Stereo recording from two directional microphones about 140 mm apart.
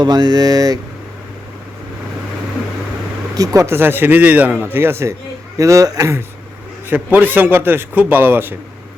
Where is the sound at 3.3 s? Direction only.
25° right (ahead or behind).